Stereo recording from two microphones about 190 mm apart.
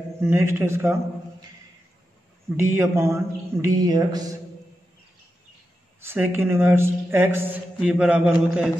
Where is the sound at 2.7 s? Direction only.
15° right (ahead or behind).